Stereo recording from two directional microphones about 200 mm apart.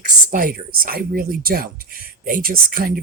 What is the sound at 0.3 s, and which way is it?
Speech, 45° right (ahead or behind).